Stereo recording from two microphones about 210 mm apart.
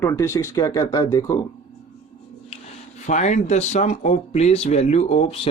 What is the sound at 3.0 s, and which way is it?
Speech, 35° left (ahead or behind).